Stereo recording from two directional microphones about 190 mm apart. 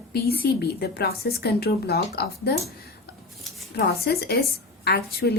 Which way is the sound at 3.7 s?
60° left (ahead or behind).